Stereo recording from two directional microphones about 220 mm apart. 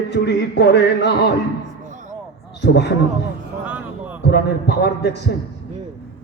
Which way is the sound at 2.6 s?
50° left (ahead or behind).